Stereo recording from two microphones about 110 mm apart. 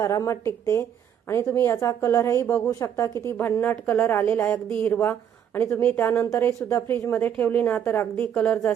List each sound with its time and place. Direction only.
0.0 s a woman's voice: 30° left (ahead or behind); by 8.7 s 15° left (ahead or behind)